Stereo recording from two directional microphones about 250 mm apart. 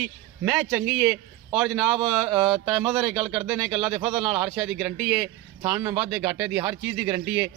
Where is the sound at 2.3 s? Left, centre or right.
Centre.